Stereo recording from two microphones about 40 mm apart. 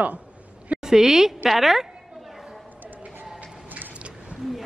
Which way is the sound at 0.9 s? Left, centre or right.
Centre.